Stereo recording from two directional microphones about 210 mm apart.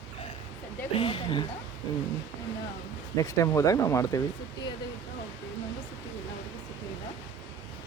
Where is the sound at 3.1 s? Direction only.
15° left (ahead or behind).